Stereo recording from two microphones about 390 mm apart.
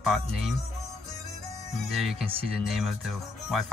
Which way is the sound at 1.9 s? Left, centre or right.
Centre.